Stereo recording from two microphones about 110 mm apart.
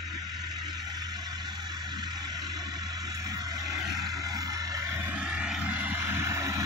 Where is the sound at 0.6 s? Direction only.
40° right (ahead or behind).